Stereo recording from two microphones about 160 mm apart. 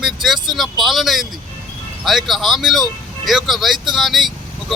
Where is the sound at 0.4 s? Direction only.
Centre (ahead or behind).